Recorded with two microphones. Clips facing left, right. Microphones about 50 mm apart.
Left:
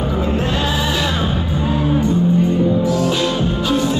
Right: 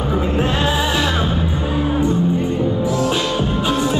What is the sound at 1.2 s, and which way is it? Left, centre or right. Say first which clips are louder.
Music: left 1 dB; centre.